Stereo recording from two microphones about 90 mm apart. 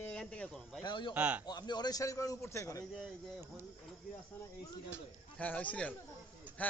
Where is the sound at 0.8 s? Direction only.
60° left (ahead or behind).